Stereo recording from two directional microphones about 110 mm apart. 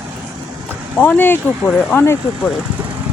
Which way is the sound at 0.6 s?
15° left (ahead or behind).